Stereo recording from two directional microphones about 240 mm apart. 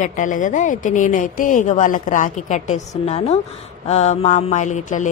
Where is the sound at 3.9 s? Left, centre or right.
Left.